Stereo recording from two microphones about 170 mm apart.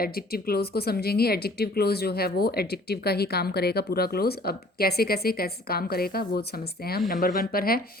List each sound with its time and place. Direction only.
0.0 s speech: 65° left (ahead or behind)